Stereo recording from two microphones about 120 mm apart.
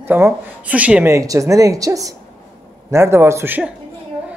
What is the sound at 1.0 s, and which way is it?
A man's voice, 25° right (ahead or behind).